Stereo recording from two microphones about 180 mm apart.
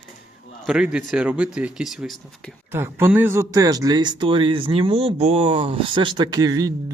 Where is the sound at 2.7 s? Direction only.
10° right (ahead or behind).